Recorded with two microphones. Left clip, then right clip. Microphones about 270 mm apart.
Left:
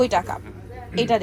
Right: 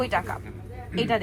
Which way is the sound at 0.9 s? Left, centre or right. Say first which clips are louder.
Left 5 dB; centre.